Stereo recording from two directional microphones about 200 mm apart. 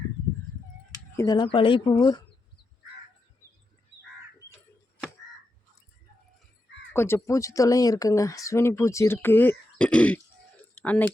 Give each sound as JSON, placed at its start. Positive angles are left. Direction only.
{"t": 1.1, "sound": "speech", "side_deg": 15}
{"t": 6.9, "sound": "speech", "side_deg": 10}